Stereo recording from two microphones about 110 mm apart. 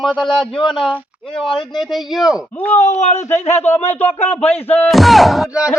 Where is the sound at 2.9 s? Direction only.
90° left.